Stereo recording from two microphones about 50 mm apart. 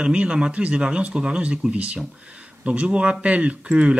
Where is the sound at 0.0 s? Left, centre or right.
Centre.